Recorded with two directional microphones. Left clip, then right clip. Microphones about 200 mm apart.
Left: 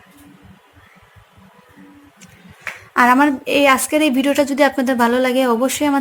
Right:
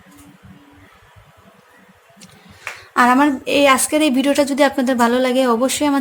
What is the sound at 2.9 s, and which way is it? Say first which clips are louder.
A woman's voice: left 1 dB; centre (ahead or behind).